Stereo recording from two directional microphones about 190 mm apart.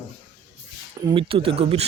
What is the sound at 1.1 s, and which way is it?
Speech, 30° right (ahead or behind).